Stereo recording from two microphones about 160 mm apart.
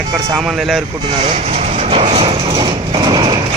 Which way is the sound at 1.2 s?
45° right (ahead or behind).